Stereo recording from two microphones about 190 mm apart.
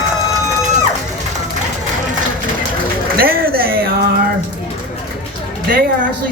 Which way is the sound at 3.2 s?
50° right (ahead or behind).